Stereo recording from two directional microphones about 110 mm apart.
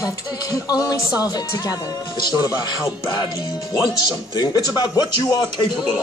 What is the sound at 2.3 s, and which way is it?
Music, 35° left (ahead or behind).